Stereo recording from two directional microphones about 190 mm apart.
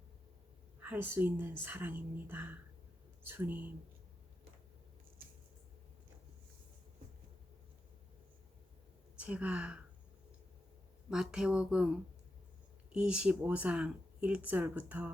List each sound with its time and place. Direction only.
0.8 s speech: 10° right (ahead or behind)
9.1 s speech: 5° right (ahead or behind)
11.1 s speech: 5° right (ahead or behind)